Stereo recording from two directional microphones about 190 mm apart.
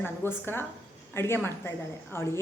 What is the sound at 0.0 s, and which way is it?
A woman's voice, 10° left (ahead or behind).